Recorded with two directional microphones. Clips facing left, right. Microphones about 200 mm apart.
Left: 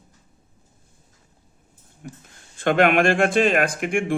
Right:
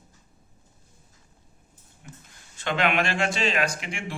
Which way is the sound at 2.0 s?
50° left (ahead or behind).